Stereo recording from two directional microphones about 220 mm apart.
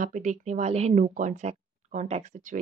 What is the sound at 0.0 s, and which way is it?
Speech, 35° right (ahead or behind).